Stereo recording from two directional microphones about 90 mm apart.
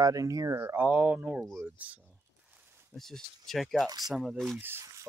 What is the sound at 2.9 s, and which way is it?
Speech, 5° left (ahead or behind).